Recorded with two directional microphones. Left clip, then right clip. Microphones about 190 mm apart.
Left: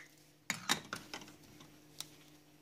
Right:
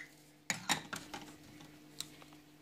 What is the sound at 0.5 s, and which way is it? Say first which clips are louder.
Dishes: even; 15° left (ahead or behind).